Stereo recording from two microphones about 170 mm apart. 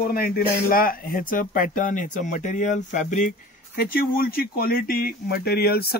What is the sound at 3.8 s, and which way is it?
Speech, 60° left (ahead or behind).